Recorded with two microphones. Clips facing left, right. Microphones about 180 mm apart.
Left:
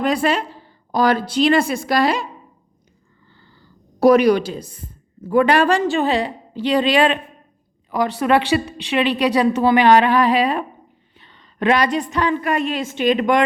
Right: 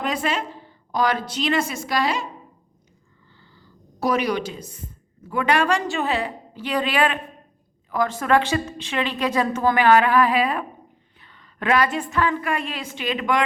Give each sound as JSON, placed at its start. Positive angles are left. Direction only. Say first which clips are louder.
{"t": 0.1, "sound": "a woman's voice", "louder": "left 6 dB", "side_deg": 35}
{"t": 1.9, "sound": "a woman's voice", "louder": "left 5 dB", "side_deg": 60}
{"t": 4.0, "sound": "a woman's voice", "louder": "left 10 dB", "side_deg": 60}
{"t": 4.3, "sound": "a woman's voice", "louder": "left 9 dB", "side_deg": 35}
{"t": 7.9, "sound": "a woman's voice", "louder": "left 3 dB", "side_deg": 15}
{"t": 9.7, "sound": "a sound", "louder": "left 2 dB", "side_deg": 25}
{"t": 11.2, "sound": "a woman's voice", "louder": "left 8 dB", "side_deg": 25}
{"t": 12.5, "sound": "a sound", "louder": "left 6 dB", "side_deg": 20}